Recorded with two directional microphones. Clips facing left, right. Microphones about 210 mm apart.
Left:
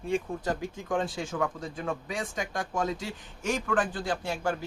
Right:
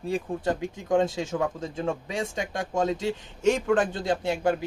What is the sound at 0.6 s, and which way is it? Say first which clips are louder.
Speech: right 6 dB; 25° right (ahead or behind).